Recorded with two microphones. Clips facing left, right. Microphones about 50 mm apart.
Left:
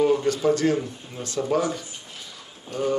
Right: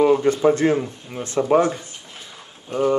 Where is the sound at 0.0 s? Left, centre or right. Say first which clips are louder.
Right 5 dB; right.